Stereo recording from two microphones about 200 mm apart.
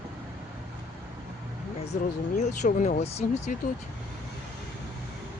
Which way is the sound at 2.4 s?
40° left (ahead or behind).